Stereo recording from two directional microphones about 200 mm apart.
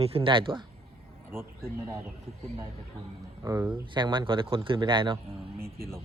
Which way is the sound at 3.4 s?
10° right (ahead or behind).